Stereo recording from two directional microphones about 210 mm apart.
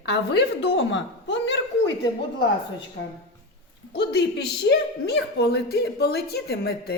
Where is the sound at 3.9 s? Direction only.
55° left (ahead or behind).